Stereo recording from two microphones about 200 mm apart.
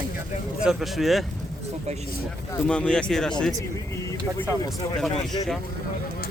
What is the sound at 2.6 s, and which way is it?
Speech, 5° left (ahead or behind).